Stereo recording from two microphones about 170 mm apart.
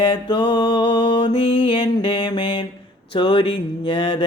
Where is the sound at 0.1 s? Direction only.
30° left (ahead or behind).